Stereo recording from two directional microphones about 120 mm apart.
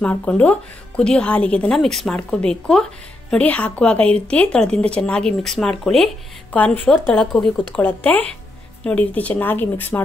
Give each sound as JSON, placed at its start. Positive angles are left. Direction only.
{"t": 0.0, "sound": "a woman's voice", "side_deg": 10}